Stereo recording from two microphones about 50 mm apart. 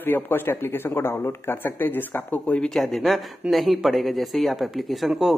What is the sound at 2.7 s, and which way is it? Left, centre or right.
Speech, centre.